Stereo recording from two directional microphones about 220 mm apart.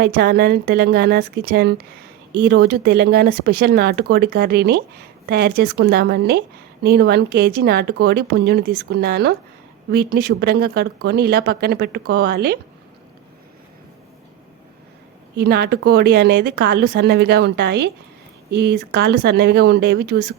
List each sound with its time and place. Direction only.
0.0 s speech: 45° right (ahead or behind)
15.4 s speech: 45° right (ahead or behind)